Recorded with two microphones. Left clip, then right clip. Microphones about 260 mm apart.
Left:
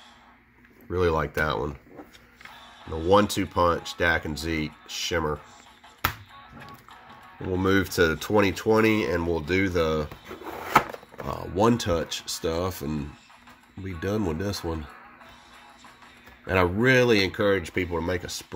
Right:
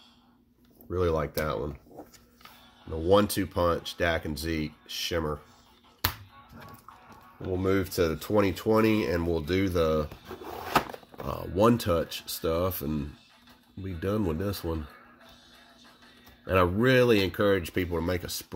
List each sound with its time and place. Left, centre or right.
0.8 s speech: centre
3.1 s speech: centre
7.6 s speech: centre
10.2 s a sound: centre
11.5 s speech: centre
16.4 s speech: centre